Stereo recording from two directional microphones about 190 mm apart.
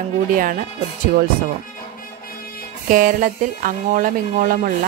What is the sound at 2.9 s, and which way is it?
Speech, 45° right (ahead or behind).